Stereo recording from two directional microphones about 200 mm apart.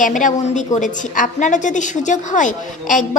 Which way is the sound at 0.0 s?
40° left (ahead or behind).